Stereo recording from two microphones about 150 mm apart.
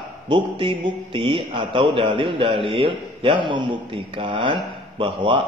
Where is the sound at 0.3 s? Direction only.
35° right (ahead or behind).